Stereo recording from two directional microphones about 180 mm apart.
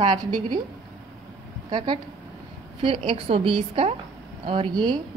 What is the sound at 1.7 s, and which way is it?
Speech, 25° right (ahead or behind).